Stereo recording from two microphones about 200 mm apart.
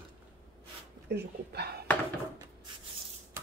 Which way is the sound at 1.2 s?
55° right (ahead or behind).